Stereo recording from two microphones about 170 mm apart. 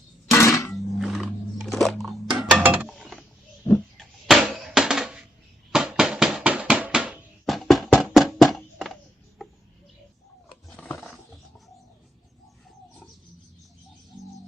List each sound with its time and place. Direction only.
0.3 s music: 15° left (ahead or behind)
0.9 s roaring cats: centre (ahead or behind)
2.4 s a sound: 5° right (ahead or behind)
2.9 s mechanisms: centre (ahead or behind)
3.9 s a sound: centre (ahead or behind)
10.7 s roaring cats: 10° left (ahead or behind)